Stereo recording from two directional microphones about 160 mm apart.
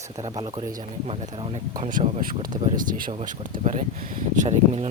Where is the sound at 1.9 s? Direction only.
60° right (ahead or behind).